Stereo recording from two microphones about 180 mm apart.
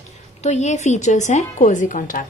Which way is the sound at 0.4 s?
40° left (ahead or behind).